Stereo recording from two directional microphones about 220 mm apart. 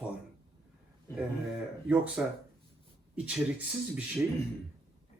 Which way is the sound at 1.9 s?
5° right (ahead or behind).